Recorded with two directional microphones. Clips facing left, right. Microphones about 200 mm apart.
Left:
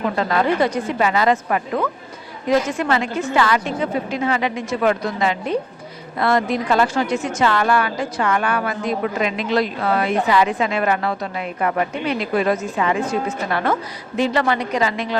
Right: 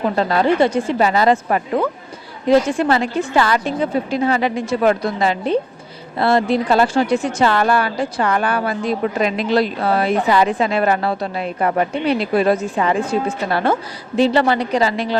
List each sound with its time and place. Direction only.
0.2 s a woman's voice: 30° right (ahead or behind)